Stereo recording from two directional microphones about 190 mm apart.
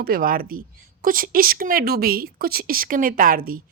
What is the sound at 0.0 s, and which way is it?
Speech, 50° right (ahead or behind).